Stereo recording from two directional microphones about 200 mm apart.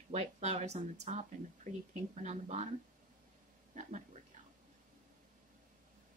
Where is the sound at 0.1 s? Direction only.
35° right (ahead or behind).